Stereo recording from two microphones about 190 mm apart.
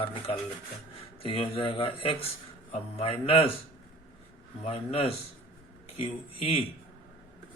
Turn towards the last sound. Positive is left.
turn(degrees=30)  # may be behind; listen again after turning